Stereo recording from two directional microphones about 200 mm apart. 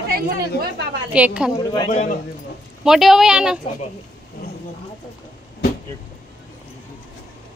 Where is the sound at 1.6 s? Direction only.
20° left (ahead or behind).